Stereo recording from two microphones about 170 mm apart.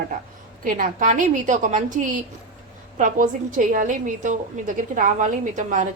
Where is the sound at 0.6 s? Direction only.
55° right (ahead or behind).